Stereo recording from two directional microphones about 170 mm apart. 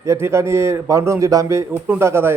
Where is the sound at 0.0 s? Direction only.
15° right (ahead or behind).